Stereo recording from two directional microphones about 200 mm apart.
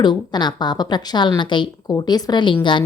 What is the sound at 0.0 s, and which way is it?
A woman's voice, 20° left (ahead or behind).